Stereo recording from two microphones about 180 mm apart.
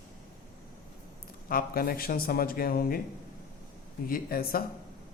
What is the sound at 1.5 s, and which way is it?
Speech, 55° left (ahead or behind).